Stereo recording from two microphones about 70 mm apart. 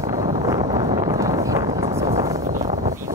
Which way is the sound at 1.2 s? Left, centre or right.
Right.